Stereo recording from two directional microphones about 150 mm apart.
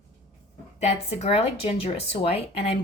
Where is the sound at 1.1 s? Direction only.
45° left (ahead or behind).